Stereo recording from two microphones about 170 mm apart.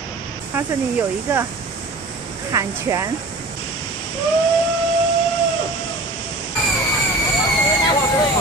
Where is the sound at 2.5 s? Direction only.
20° right (ahead or behind).